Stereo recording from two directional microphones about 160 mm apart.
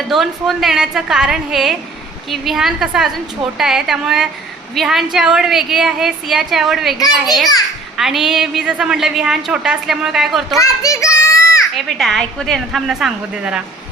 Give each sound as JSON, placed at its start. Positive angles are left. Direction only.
{"t": 0.1, "sound": "a woman's voice", "side_deg": 0}
{"t": 10.6, "sound": "children playing", "side_deg": 20}
{"t": 11.7, "sound": "a woman's voice", "side_deg": 0}